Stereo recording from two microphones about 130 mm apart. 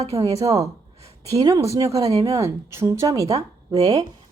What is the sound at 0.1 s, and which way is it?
A woman's voice, 25° right (ahead or behind).